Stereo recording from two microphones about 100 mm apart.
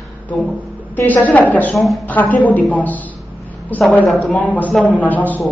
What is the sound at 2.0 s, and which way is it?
A woman's voice, 15° left (ahead or behind).